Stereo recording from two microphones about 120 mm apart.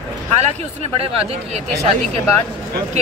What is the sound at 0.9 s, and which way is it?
Speech, 60° right (ahead or behind).